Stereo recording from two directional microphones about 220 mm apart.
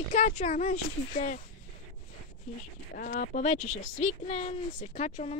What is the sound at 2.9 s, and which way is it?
Speech, 40° left (ahead or behind).